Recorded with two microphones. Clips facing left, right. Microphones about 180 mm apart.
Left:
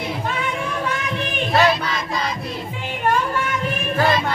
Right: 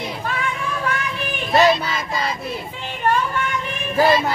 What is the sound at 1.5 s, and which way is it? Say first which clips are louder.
Child singing: right 3 dB; centre (ahead or behind).